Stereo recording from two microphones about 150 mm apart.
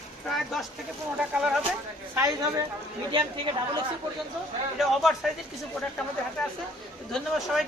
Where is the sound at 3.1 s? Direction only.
35° right (ahead or behind).